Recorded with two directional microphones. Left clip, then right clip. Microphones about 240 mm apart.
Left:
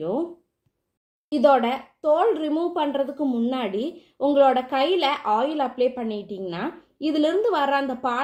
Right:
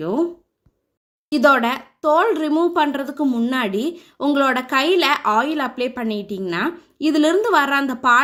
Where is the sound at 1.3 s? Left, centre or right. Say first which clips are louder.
Right 3 dB; right.